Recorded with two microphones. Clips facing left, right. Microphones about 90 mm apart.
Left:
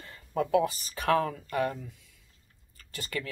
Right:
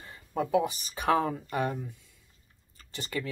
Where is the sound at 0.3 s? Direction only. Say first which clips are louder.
Left 1 dB; 15° right (ahead or behind).